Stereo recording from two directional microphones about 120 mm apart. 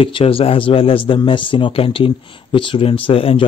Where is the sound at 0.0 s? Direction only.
50° left (ahead or behind).